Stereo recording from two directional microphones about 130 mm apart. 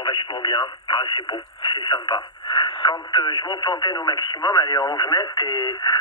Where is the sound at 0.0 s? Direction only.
35° left (ahead or behind).